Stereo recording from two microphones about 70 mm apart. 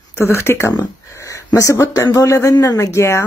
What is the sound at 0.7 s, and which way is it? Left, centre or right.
Speech, left.